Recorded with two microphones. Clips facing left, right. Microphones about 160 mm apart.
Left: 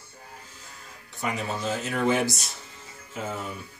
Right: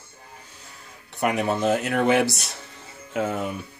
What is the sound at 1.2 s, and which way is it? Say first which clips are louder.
Speech: right 7 dB; 65° right (ahead or behind).